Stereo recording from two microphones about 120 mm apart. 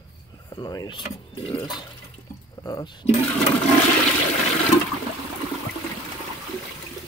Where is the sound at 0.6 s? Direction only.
35° left (ahead or behind).